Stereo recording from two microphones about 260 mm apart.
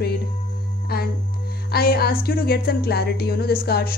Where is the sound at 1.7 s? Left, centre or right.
Left.